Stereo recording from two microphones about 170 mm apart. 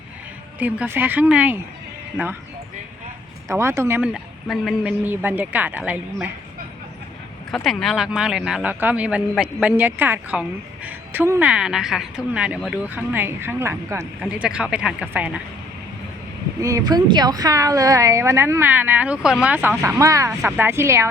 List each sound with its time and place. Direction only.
0.6 s a woman's voice: 10° right (ahead or behind)
3.5 s a woman's voice: 15° right (ahead or behind)
7.5 s a woman's voice: centre (ahead or behind)
16.6 s a woman's voice: 20° right (ahead or behind)